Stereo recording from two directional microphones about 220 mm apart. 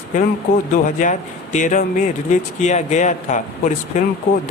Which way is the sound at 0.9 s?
35° left (ahead or behind).